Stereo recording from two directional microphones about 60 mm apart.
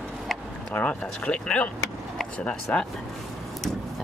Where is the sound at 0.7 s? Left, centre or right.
Left.